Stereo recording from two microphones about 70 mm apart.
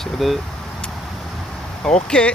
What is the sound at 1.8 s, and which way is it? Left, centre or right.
Speech, centre.